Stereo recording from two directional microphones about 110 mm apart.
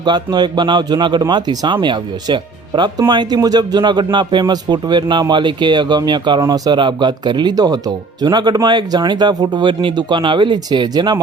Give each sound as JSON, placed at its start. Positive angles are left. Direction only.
{"t": 0.0, "sound": "speech", "side_deg": -40}